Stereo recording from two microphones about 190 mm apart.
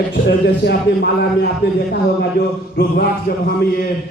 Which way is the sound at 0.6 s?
60° left (ahead or behind).